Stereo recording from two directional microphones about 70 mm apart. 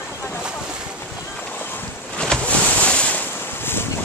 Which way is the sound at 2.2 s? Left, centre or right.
Centre.